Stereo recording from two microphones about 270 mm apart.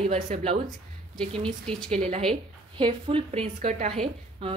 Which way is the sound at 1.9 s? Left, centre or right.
Right.